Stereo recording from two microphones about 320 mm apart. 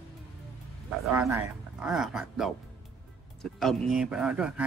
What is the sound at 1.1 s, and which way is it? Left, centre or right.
Speech, centre.